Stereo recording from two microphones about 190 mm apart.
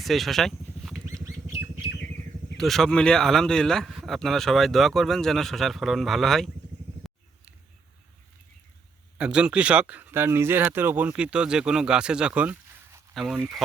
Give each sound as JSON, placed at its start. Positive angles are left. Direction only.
{"t": 0.0, "sound": "a sound", "side_deg": 0}
{"t": 1.0, "sound": "bird", "side_deg": -15}
{"t": 2.6, "sound": "speech", "side_deg": 0}
{"t": 9.1, "sound": "speech", "side_deg": -5}